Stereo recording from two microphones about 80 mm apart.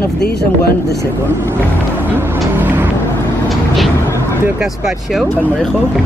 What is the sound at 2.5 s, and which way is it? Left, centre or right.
Vehicle, right.